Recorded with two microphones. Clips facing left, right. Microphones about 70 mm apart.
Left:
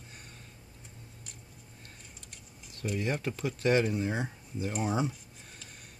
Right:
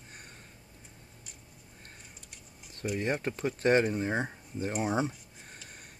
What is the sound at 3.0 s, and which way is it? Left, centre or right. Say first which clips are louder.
Speech: right 2 dB; right.